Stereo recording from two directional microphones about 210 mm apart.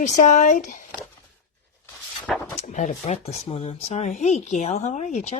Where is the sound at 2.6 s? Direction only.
35° left (ahead or behind).